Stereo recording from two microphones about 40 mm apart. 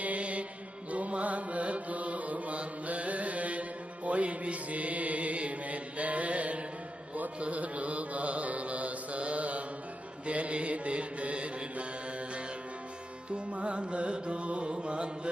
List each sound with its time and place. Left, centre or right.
0.0 s music: right
7.3 s mantra: right
13.3 s music: right